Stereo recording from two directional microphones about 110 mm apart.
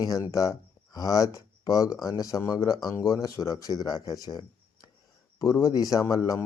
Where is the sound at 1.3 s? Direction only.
30° left (ahead or behind).